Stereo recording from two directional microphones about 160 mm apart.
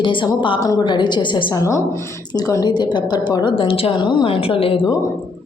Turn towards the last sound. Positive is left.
turn(degrees=35)  # may be behind; listen again after turning